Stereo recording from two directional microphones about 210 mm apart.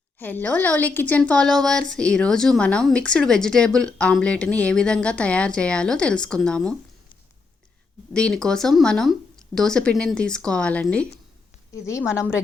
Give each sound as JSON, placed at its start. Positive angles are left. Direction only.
{"t": 0.2, "sound": "a woman's voice", "side_deg": 10}
{"t": 8.1, "sound": "a woman's voice", "side_deg": 5}